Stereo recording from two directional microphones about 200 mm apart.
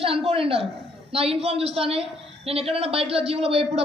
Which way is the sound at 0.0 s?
30° right (ahead or behind).